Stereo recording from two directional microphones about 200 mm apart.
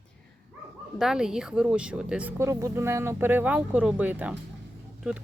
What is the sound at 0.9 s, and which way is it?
Speech, centre (ahead or behind).